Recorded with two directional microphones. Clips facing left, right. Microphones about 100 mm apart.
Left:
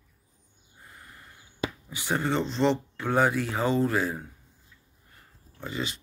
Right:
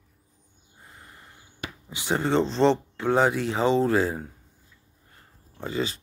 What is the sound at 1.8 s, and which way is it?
Speech, 25° right (ahead or behind).